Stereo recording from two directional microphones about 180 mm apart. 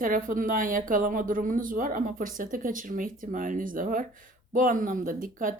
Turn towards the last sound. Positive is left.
turn(degrees=-50)  # may be behind; listen again after turning